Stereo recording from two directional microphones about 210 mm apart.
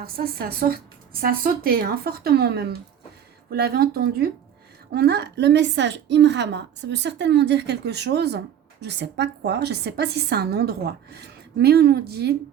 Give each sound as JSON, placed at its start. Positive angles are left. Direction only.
{"t": 0.0, "sound": "a woman's voice", "side_deg": -45}